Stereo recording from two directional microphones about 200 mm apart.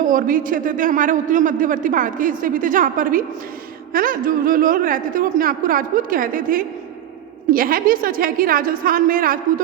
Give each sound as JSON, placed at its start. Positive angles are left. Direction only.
{"t": 0.0, "sound": "a man's voice", "side_deg": -45}